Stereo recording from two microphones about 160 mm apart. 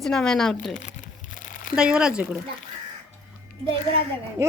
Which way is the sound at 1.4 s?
60° left (ahead or behind).